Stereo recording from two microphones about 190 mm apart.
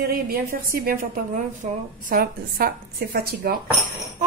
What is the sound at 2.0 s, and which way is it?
Speech, 50° right (ahead or behind).